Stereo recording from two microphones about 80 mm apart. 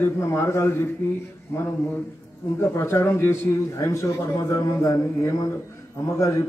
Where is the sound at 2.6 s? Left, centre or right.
Left.